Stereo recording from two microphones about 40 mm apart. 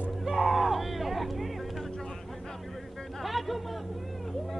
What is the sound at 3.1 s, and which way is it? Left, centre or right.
Music, centre.